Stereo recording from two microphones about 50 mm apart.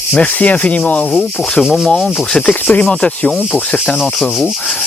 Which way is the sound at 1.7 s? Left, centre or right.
Centre.